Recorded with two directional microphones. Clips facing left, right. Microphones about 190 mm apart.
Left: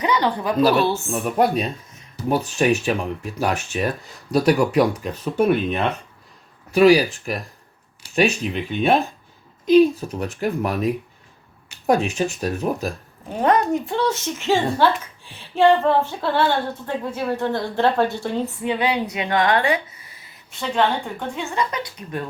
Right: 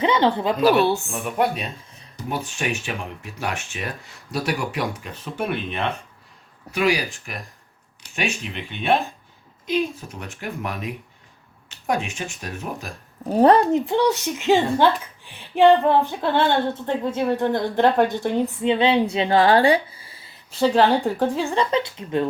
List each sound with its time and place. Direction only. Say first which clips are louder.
0.0 s speech: right 2 dB; 25° right (ahead or behind)
1.1 s speech: left 4 dB; 40° left (ahead or behind)
13.2 s speech: right 4 dB; 35° right (ahead or behind)